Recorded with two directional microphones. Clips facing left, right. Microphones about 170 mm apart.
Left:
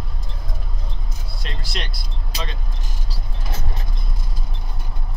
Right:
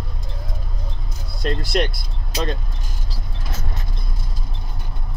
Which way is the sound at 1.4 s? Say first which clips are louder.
Right 12 dB; 50° right (ahead or behind).